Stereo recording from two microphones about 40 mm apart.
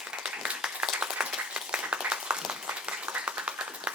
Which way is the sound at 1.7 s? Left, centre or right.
Right.